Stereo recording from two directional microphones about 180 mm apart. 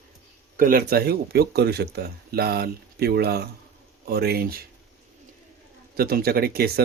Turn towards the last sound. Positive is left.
turn(degrees=-60)  # may be behind; listen again after turning